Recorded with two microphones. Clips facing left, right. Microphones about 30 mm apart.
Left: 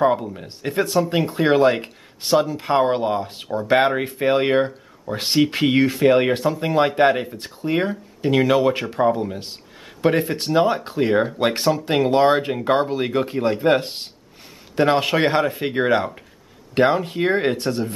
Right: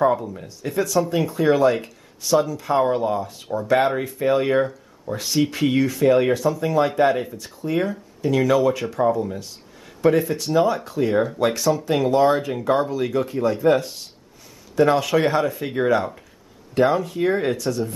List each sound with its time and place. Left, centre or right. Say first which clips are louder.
0.2 s speech: left 1 dB; left
0.6 s speech: left 1 dB; left